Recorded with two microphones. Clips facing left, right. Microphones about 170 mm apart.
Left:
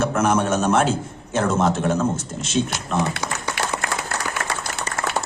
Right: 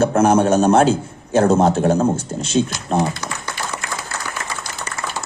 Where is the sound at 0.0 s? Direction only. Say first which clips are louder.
Right 5 dB; 30° right (ahead or behind).